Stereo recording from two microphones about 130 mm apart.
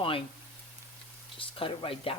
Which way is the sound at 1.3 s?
40° left (ahead or behind).